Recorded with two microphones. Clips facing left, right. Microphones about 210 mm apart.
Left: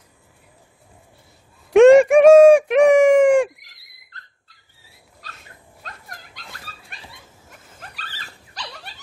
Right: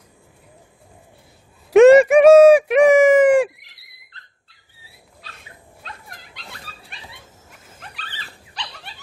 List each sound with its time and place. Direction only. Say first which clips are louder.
1.7 s a sound: even; 5° right (ahead or behind)
3.5 s owl: right 1 dB; 40° left (ahead or behind)
5.2 s dog: even; 45° left (ahead or behind)
7.8 s dog: right 1 dB; 40° left (ahead or behind)